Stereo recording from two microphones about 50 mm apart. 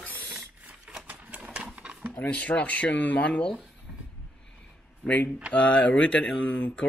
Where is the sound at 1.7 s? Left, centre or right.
Right.